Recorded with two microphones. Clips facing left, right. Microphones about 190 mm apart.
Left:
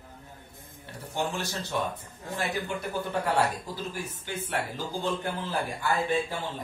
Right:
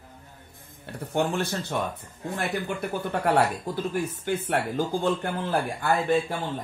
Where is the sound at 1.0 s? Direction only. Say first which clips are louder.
Right 6 dB; 55° right (ahead or behind).